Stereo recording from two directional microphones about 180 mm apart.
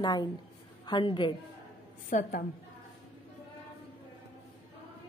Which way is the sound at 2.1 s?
45° left (ahead or behind).